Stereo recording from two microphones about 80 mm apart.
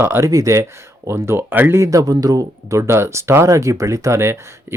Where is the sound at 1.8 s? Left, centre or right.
Right.